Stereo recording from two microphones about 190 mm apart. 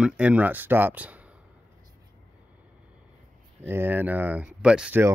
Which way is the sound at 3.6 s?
10° right (ahead or behind).